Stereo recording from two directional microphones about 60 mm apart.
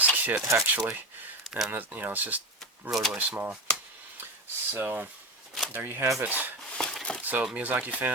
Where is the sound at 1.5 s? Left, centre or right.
Centre.